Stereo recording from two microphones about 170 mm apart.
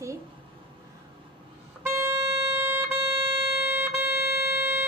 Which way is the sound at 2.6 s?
10° right (ahead or behind).